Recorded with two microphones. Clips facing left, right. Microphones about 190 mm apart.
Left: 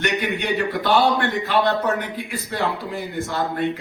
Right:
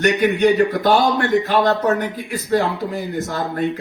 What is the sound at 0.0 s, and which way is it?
A man's voice, 45° right (ahead or behind).